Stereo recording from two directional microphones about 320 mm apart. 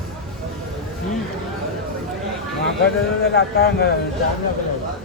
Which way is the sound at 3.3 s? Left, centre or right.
Left.